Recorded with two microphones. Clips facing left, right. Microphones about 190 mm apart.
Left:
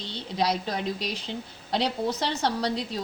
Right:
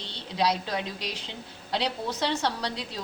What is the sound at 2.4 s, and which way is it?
Speech, 45° left (ahead or behind).